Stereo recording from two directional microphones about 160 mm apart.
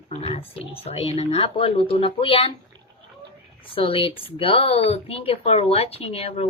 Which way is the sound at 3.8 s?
35° left (ahead or behind).